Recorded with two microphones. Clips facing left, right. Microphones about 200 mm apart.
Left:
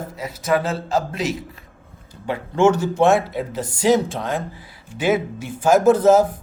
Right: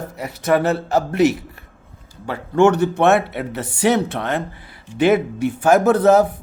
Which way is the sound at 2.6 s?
65° right (ahead or behind).